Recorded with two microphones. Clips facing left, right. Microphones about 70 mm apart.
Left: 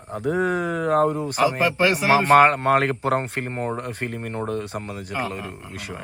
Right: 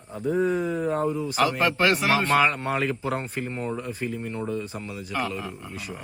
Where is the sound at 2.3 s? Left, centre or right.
Left.